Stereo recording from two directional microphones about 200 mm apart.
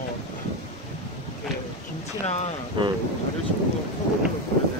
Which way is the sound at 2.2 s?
35° left (ahead or behind).